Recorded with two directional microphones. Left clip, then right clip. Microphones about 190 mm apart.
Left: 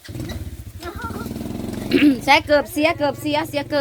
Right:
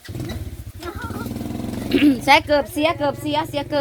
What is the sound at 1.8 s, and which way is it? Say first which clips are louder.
Dog: left 1 dB; 20° left (ahead or behind).